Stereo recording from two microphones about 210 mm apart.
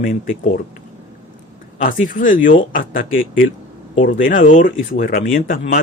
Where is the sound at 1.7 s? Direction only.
40° left (ahead or behind).